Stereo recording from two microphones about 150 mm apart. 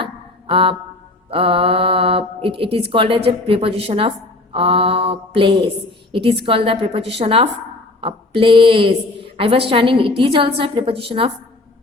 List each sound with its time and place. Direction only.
0.0 s mantra: 35° right (ahead or behind)
1.3 s a woman's voice: 35° right (ahead or behind)